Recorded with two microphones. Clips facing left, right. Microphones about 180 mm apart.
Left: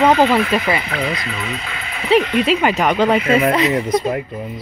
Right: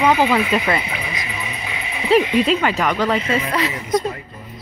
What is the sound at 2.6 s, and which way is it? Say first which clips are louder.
Speech: left 4 dB; 20° left (ahead or behind).